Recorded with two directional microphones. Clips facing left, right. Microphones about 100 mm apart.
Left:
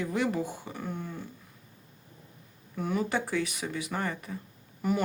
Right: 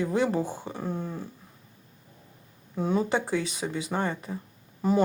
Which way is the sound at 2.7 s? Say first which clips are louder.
Right 4 dB; 25° right (ahead or behind).